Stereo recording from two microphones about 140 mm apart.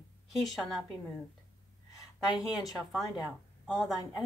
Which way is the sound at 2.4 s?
Centre (ahead or behind).